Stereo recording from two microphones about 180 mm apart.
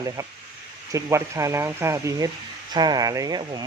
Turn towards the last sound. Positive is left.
turn(degrees=-20)  # may be behind; listen again after turning